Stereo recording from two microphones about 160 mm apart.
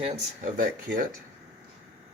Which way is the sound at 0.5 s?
60° right (ahead or behind).